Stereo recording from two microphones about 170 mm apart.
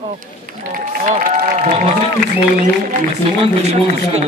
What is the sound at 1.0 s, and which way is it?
Run, 45° right (ahead or behind).